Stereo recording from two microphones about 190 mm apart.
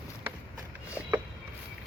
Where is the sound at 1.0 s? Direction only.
5° right (ahead or behind).